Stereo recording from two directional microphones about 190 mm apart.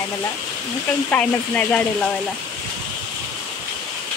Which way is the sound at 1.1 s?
10° left (ahead or behind).